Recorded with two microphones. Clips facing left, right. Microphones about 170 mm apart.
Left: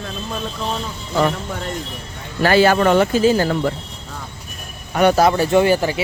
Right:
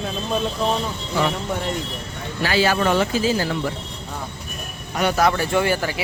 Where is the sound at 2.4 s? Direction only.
50° left (ahead or behind).